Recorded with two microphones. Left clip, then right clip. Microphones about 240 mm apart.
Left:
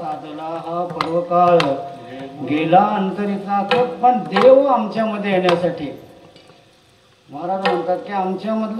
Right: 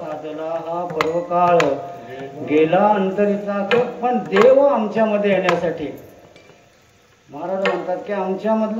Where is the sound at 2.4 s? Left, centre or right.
Centre.